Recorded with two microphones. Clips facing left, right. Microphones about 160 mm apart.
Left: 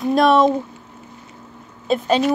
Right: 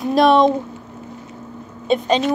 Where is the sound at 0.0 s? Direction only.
Centre (ahead or behind).